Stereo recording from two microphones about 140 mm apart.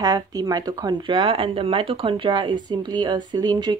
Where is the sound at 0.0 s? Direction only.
25° right (ahead or behind).